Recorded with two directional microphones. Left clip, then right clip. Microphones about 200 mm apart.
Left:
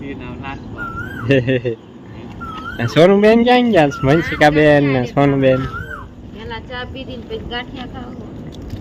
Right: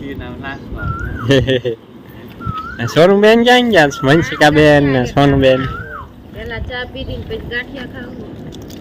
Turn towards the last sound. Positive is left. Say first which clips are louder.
# right 3 dB
turn(degrees=15)  # may be behind; listen again after turning